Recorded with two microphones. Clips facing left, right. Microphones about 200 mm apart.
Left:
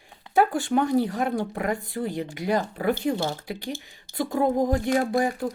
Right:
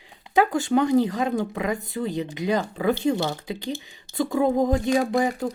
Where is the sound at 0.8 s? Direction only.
90° right.